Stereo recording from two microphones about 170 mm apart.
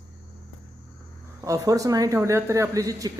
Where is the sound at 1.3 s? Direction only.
20° right (ahead or behind).